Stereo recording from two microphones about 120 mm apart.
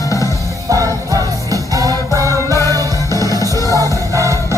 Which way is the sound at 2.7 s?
30° right (ahead or behind).